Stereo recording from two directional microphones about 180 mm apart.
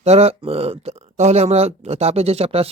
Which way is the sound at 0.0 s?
35° right (ahead or behind).